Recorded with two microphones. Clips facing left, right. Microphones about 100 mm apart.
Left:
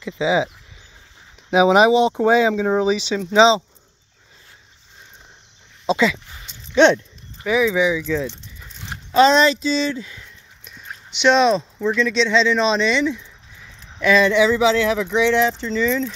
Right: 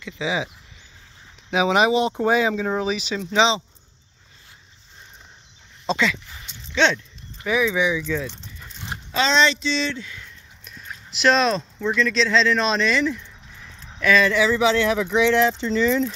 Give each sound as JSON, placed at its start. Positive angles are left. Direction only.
{"t": 0.0, "sound": "speech", "side_deg": 25}
{"t": 1.5, "sound": "speech", "side_deg": 20}
{"t": 3.3, "sound": "speech", "side_deg": 30}
{"t": 5.9, "sound": "a sound", "side_deg": 10}
{"t": 6.7, "sound": "speech", "side_deg": 15}
{"t": 8.5, "sound": "dog", "side_deg": 0}
{"t": 9.1, "sound": "speech", "side_deg": 45}
{"t": 9.4, "sound": "speech", "side_deg": 5}
{"t": 11.1, "sound": "speech", "side_deg": 0}
{"t": 14.2, "sound": "speech", "side_deg": 15}
{"t": 14.6, "sound": "speech", "side_deg": 0}